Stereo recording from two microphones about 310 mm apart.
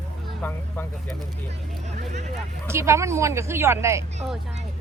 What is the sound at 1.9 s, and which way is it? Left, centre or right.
Vehicle, right.